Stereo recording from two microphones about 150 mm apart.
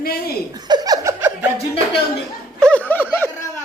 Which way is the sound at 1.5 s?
40° left (ahead or behind).